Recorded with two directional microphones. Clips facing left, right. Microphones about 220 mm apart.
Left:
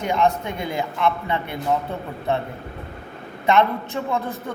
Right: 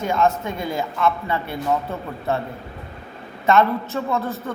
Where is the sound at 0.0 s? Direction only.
15° left (ahead or behind).